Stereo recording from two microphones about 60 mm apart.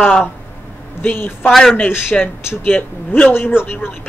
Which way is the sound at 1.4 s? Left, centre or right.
Centre.